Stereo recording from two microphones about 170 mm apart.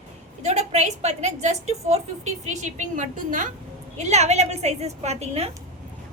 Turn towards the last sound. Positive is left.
turn(degrees=-40)  # may be behind; listen again after turning